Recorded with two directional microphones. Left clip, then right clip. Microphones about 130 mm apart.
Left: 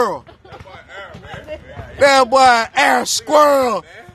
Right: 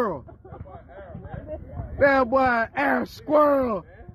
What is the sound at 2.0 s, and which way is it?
Speech, 15° left (ahead or behind).